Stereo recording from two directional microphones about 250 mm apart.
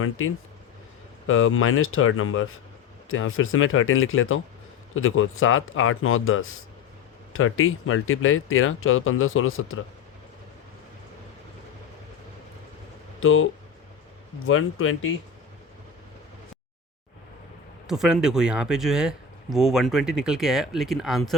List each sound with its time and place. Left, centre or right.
0.0 s speech: left
13.1 s speech: left
17.8 s speech: centre